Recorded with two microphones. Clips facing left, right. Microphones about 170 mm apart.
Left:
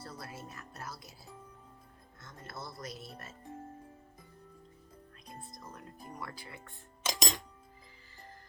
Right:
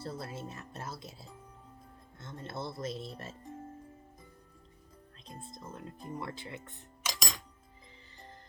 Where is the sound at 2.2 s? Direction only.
25° right (ahead or behind).